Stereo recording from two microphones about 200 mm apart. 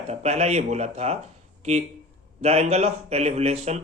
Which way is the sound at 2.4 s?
30° right (ahead or behind).